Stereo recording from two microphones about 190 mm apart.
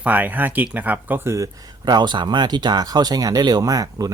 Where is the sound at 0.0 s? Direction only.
10° right (ahead or behind).